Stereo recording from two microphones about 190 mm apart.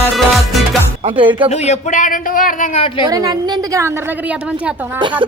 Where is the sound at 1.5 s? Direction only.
40° left (ahead or behind).